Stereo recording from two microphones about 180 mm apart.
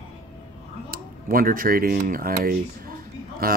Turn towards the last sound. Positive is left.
turn(degrees=-55)  # may be behind; listen again after turning